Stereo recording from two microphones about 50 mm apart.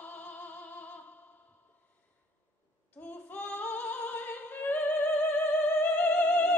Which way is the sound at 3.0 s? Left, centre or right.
Left.